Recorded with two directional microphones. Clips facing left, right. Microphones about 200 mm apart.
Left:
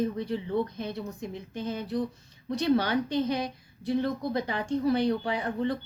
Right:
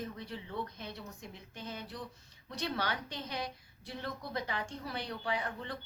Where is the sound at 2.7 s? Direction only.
25° left (ahead or behind).